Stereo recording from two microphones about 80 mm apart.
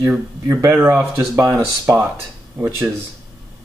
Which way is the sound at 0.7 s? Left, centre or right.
Right.